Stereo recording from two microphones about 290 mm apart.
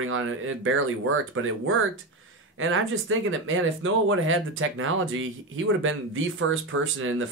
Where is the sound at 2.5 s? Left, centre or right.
Right.